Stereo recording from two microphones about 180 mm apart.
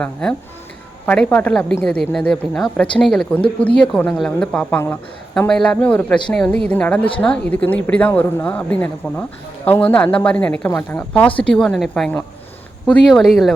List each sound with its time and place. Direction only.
0.0 s a woman's voice: 5° left (ahead or behind)
11.3 s a woman's voice: 30° left (ahead or behind)
11.5 s a woman's voice: centre (ahead or behind)